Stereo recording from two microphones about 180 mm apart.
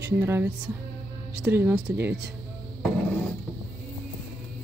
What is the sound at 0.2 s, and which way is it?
Speech, 15° right (ahead or behind).